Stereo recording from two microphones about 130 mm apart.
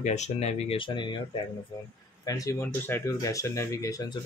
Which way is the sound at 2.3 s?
25° left (ahead or behind).